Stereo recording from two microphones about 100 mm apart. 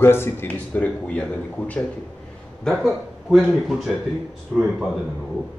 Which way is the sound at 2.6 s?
Centre (ahead or behind).